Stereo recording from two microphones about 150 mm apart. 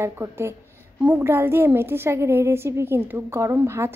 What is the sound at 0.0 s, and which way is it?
A woman's voice, 20° right (ahead or behind).